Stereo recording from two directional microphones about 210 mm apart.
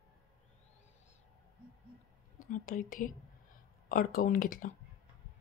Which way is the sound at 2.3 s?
40° left (ahead or behind).